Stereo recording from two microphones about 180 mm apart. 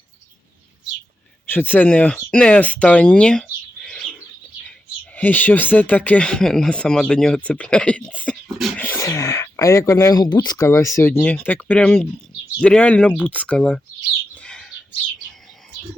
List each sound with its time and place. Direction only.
1.5 s speech: 10° left (ahead or behind)
5.1 s speech: 10° left (ahead or behind)
8.4 s beatboxing: centre (ahead or behind)
8.8 s speech: 15° left (ahead or behind)
14.3 s bird: 5° left (ahead or behind)